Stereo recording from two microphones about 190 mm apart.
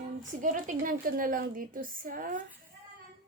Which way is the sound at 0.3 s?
40° right (ahead or behind).